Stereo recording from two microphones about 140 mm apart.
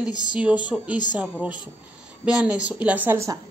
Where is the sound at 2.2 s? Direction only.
5° right (ahead or behind).